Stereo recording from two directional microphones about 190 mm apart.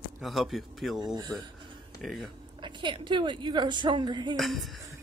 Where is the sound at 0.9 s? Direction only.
20° right (ahead or behind).